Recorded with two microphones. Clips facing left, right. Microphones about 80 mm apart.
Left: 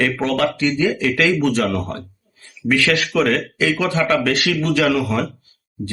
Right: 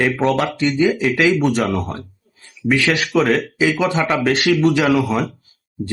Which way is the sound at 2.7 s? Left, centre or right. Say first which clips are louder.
Even; right.